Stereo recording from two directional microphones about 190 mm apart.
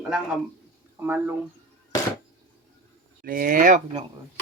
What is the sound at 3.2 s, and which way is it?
Speech, 50° right (ahead or behind).